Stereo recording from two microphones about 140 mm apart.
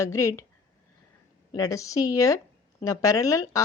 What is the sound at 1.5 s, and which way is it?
A woman's voice, 25° left (ahead or behind).